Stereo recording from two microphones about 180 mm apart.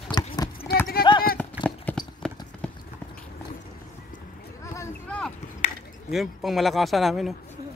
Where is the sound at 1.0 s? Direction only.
55° left (ahead or behind).